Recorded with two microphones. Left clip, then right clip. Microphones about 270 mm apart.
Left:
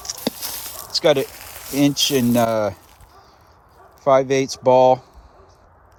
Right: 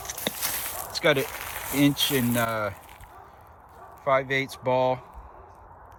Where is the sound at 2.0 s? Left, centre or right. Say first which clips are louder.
Left 7 dB; centre.